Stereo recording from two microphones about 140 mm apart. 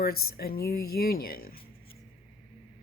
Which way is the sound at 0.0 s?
90° left.